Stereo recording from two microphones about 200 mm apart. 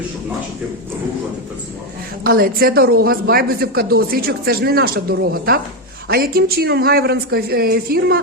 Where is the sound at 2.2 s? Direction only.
45° right (ahead or behind).